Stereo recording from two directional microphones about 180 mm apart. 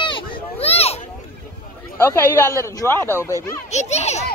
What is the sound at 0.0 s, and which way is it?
Children playing, 30° left (ahead or behind).